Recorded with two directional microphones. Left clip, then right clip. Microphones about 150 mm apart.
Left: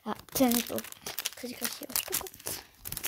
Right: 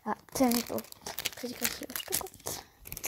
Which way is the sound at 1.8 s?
5° right (ahead or behind).